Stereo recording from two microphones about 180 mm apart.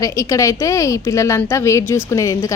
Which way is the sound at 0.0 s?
15° left (ahead or behind).